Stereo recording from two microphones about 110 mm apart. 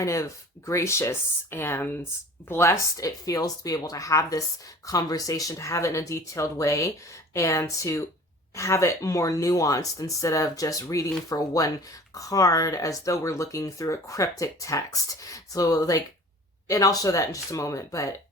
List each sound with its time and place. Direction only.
0.0 s speech: 30° left (ahead or behind)